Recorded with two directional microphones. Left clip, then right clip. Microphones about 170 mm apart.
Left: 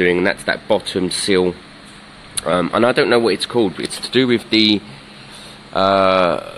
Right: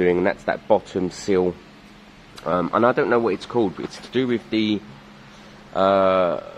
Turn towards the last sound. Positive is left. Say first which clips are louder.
# left 4 dB
turn(degrees=15)  # may be behind; listen again after turning